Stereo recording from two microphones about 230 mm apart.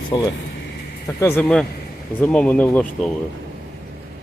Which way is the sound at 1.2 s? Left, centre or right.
Centre.